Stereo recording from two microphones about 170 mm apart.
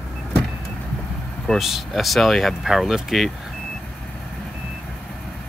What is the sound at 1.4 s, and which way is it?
Speech, centre (ahead or behind).